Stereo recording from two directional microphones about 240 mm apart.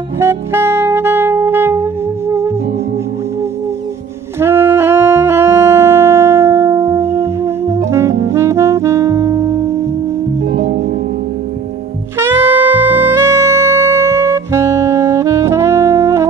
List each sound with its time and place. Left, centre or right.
0.2 s saxophone: centre
4.4 s saxophone: centre
10.5 s music: right
12.2 s saxophone: centre